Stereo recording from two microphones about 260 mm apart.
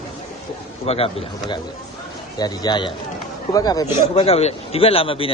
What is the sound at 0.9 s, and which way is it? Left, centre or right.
A man's voice, left.